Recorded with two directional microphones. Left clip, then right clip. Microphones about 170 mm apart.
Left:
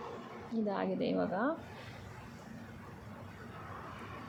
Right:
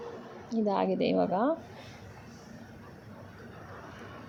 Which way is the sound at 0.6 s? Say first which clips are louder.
Right 7 dB; 30° right (ahead or behind).